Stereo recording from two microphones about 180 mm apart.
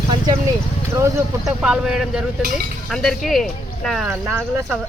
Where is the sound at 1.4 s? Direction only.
5° right (ahead or behind).